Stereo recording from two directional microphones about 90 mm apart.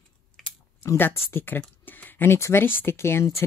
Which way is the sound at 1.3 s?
25° left (ahead or behind).